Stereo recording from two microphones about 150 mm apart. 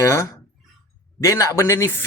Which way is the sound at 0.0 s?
20° left (ahead or behind).